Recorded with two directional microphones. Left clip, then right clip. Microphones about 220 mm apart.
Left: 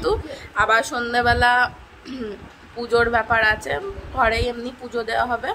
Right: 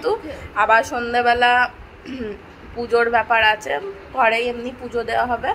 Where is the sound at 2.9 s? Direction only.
5° left (ahead or behind).